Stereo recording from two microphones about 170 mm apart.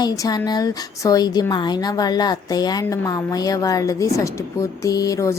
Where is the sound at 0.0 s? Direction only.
20° left (ahead or behind).